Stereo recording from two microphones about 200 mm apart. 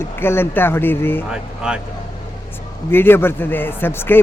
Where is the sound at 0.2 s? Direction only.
10° left (ahead or behind).